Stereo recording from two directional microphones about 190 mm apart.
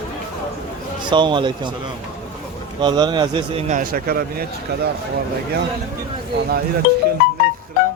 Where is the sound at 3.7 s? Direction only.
45° right (ahead or behind).